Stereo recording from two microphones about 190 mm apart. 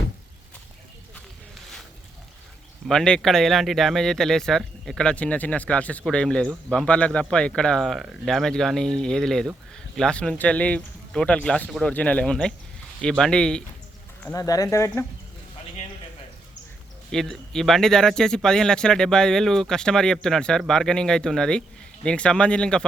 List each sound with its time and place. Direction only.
2.8 s speech: 5° left (ahead or behind)
14.3 s speech: 20° left (ahead or behind)
17.1 s speech: 5° left (ahead or behind)